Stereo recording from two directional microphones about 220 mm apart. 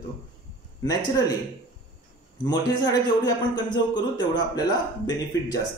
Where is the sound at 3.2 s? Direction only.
20° left (ahead or behind).